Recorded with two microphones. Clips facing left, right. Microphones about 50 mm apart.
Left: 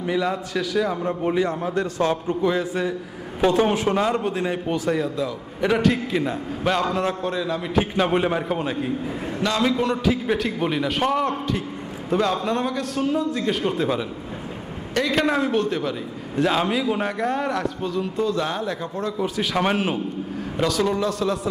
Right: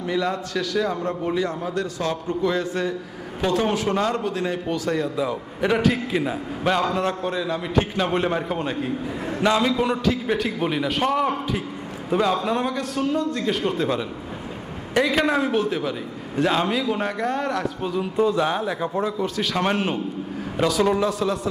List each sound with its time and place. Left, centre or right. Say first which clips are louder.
0.0 s a man's voice: left 1 dB; centre
1.2 s a man's voice: left 5 dB; centre
2.5 s a man's voice: even; centre
3.4 s a man's voice: left 3 dB; left
3.9 s a man's voice: left 1 dB; centre
4.2 s a man's voice: left 1 dB; left
4.4 s a man's voice: left 1 dB; centre
5.5 s a man's voice: left 1 dB; centre
15.1 s a man's voice: even; centre
17.8 s a man's voice: right 5 dB; centre
19.2 s a man's voice: left 1 dB; centre